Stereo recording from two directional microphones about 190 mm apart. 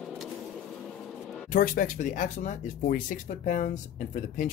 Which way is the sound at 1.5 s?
50° left (ahead or behind).